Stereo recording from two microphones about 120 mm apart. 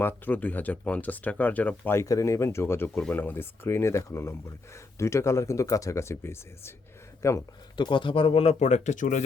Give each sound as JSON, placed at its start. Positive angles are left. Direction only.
{"t": 0.0, "sound": "speech", "side_deg": 15}
{"t": 7.8, "sound": "speech", "side_deg": 40}